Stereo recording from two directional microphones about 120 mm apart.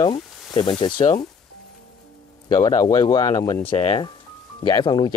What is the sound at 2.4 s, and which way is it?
Speech, 40° left (ahead or behind).